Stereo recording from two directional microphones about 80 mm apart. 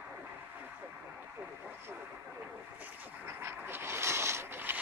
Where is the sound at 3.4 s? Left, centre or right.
Right.